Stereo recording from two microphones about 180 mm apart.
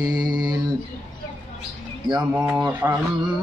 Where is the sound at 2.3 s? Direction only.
10° right (ahead or behind).